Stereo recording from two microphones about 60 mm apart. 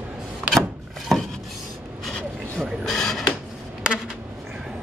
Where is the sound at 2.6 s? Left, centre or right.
Centre.